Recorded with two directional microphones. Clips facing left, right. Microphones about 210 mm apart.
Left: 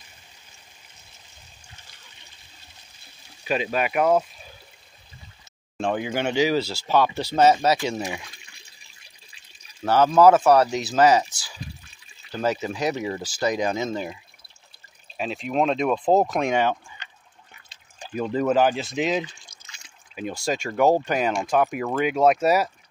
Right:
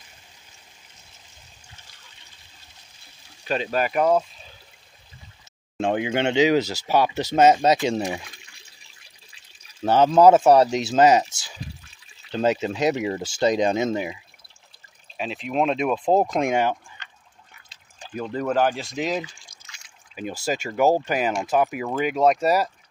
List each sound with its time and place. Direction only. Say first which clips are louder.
3.4 s speech: even; 5° left (ahead or behind)
5.8 s speech: right 2 dB; 20° right (ahead or behind)
9.8 s speech: right 1 dB; 20° right (ahead or behind)
15.1 s speech: even; centre (ahead or behind)
18.1 s speech: left 3 dB; 5° left (ahead or behind)